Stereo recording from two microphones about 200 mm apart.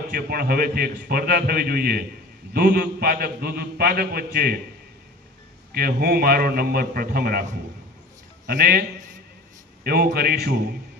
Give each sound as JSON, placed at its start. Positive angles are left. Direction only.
{"t": 0.1, "sound": "a man's voice", "side_deg": -50}
{"t": 5.7, "sound": "a man's voice", "side_deg": -50}